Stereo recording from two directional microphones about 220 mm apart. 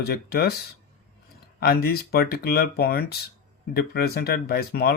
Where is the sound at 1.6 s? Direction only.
45° left (ahead or behind).